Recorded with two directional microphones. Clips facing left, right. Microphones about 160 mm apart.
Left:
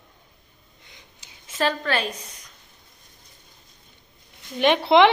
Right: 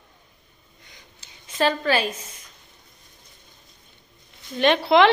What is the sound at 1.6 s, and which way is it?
Speech, centre (ahead or behind).